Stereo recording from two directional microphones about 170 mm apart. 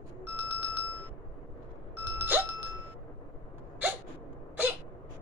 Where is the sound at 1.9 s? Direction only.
10° right (ahead or behind).